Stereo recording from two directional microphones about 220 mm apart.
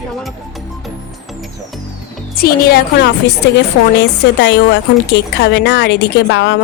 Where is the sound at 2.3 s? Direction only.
45° left (ahead or behind).